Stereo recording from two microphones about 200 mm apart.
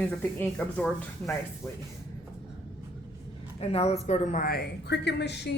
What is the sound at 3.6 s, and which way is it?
A woman's voice, 30° left (ahead or behind).